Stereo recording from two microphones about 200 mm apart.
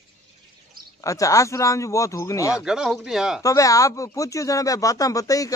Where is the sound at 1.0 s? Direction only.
15° left (ahead or behind).